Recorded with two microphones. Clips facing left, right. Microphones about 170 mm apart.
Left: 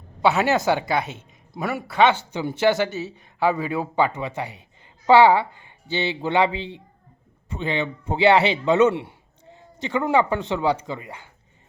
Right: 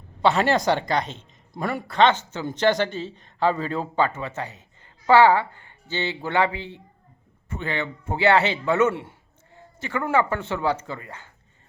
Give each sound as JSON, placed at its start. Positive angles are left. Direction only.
{"t": 0.2, "sound": "speech", "side_deg": 5}